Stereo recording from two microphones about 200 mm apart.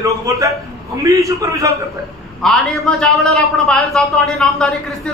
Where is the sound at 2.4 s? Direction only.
Centre (ahead or behind).